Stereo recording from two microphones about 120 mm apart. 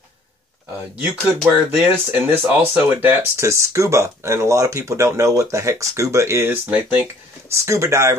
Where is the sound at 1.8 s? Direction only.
15° right (ahead or behind).